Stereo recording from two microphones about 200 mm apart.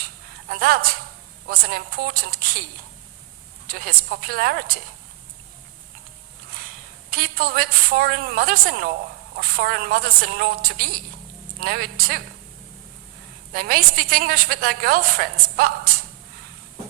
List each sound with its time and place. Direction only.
0.4 s a woman's voice: 50° right (ahead or behind)
3.7 s a woman's voice: 50° right (ahead or behind)
7.1 s a woman's voice: 50° right (ahead or behind)
13.5 s a woman's voice: 50° right (ahead or behind)